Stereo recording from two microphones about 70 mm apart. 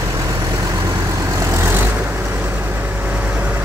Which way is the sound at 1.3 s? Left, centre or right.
Right.